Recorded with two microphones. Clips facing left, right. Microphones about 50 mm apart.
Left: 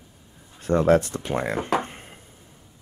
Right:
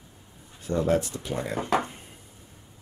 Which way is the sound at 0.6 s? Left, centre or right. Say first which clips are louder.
Left 6 dB; left.